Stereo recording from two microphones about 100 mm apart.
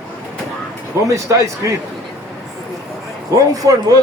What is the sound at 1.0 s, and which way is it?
Speech, 30° right (ahead or behind).